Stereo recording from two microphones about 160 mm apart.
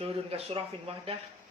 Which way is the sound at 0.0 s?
40° right (ahead or behind).